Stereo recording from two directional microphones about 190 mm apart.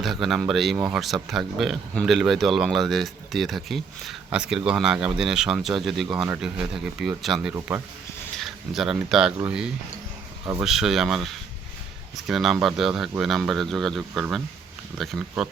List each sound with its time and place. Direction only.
0.0 s speech: centre (ahead or behind)